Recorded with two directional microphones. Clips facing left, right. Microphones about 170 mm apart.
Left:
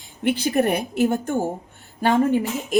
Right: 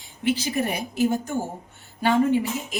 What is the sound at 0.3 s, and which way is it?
A woman's voice, 60° left (ahead or behind).